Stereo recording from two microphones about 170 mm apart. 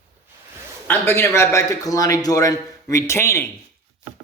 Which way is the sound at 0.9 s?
15° left (ahead or behind).